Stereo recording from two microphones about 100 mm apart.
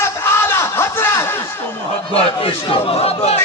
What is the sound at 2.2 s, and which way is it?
Speech, 70° left (ahead or behind).